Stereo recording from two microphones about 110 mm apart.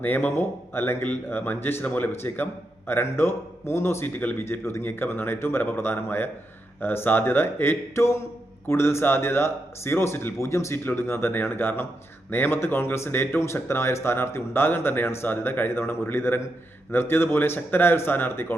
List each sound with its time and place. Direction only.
0.0 s speech: 15° left (ahead or behind)